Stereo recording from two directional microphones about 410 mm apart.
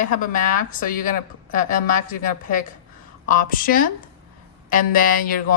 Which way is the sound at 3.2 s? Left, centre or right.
Centre.